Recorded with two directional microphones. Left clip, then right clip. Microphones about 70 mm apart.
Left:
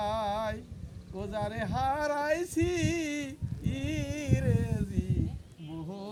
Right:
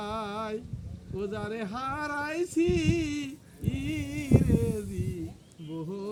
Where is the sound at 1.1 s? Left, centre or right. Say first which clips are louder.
Even; left.